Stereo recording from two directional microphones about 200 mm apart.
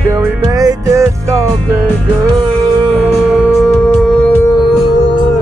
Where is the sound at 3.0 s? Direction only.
5° right (ahead or behind).